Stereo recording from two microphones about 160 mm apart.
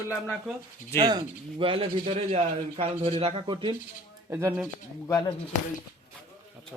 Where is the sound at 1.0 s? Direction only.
25° right (ahead or behind).